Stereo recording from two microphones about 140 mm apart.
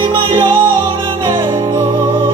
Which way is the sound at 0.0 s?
40° right (ahead or behind).